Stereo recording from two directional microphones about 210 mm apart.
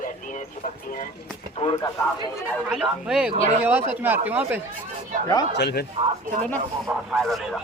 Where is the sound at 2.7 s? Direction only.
5° right (ahead or behind).